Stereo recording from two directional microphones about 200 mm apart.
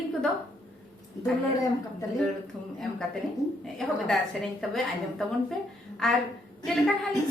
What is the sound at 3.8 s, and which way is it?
A woman's voice, centre (ahead or behind).